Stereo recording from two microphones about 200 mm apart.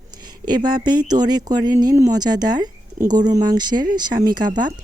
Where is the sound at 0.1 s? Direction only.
20° right (ahead or behind).